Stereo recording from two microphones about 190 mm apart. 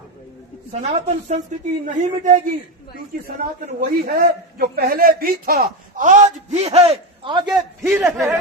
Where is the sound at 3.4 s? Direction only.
45° right (ahead or behind); by 7.4 s 30° right (ahead or behind).